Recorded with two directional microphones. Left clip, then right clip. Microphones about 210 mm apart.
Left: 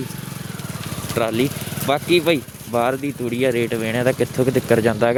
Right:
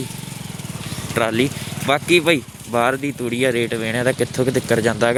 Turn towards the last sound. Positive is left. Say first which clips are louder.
# left 1 dB
turn(degrees=10)  # may be behind; listen again after turning